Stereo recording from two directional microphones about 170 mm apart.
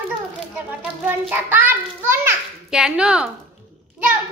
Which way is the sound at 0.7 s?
10° right (ahead or behind).